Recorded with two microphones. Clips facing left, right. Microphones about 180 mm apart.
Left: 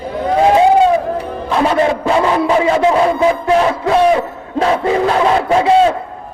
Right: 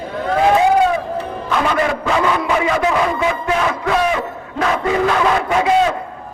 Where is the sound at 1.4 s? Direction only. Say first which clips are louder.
Left 5 dB; 30° left (ahead or behind).